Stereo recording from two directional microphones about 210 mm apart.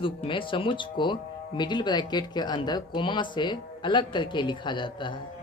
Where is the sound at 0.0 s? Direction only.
25° left (ahead or behind).